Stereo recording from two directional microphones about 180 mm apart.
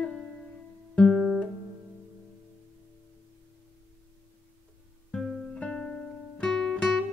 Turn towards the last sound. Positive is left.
turn(degrees=5)  # may be behind; listen again after turning